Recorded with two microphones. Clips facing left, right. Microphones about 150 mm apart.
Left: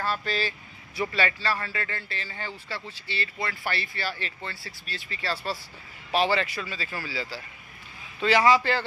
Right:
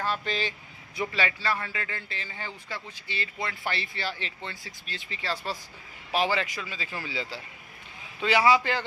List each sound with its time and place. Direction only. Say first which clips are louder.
0.0 s vehicle: left 1 dB; 20° right (ahead or behind)
1.0 s a man's voice: left 2 dB; 15° right (ahead or behind)
8.2 s a man's voice: left 2 dB; 10° right (ahead or behind)